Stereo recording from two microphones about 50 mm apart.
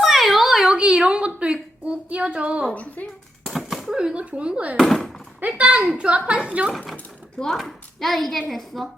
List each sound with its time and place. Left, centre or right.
0.0 s a sound: centre; by 1.5 s right
1.9 s speech: right
2.6 s speech: left
3.4 s a sound: centre
3.8 s speech: centre
4.8 s speech: centre
5.4 s speech: right
5.8 s a woman's voice: centre
6.1 s speech: right
6.7 s speech: centre